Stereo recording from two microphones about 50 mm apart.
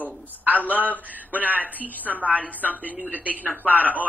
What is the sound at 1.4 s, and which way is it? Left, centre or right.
Speech, right.